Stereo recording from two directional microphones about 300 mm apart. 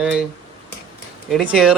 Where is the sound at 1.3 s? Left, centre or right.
Centre.